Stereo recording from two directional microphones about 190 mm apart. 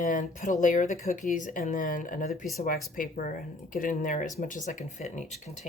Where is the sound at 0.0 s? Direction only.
40° left (ahead or behind).